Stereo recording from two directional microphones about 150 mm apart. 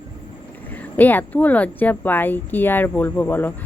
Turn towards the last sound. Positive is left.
turn(degrees=15)  # may be behind; listen again after turning